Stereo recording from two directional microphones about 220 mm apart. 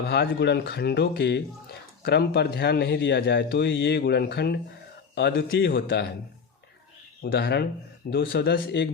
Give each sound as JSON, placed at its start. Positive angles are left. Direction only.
{"t": 0.1, "sound": "speech", "side_deg": 50}
{"t": 7.2, "sound": "speech", "side_deg": 45}